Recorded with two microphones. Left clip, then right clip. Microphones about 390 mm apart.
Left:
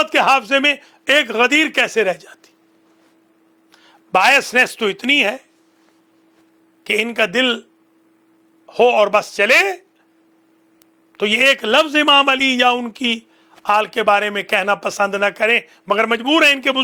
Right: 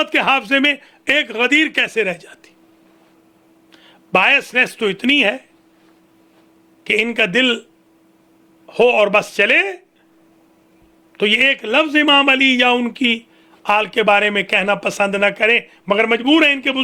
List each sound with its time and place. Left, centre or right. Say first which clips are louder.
0.0 s a man's voice: left 2 dB; left
3.7 s a man's voice: even; left
6.8 s speech: right 1 dB; left
8.6 s speech: even; left
11.2 s a man's voice: even; left